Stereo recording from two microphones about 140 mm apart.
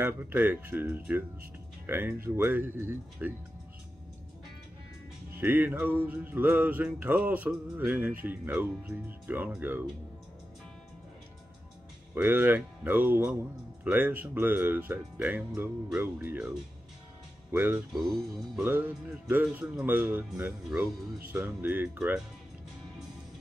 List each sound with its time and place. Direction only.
0.0 s music: 15° right (ahead or behind)
5.3 s music: 15° right (ahead or behind)
12.1 s music: 15° right (ahead or behind)
17.5 s speech: 15° right (ahead or behind)
18.6 s music: 15° right (ahead or behind)